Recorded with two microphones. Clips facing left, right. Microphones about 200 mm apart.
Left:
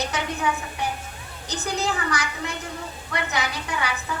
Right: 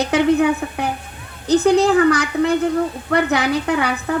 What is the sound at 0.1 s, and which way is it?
A woman's voice, 60° right (ahead or behind).